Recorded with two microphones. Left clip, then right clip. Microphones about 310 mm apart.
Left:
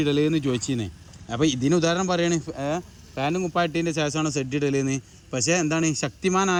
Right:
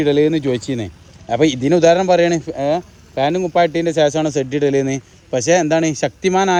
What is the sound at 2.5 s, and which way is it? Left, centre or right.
Speech, centre.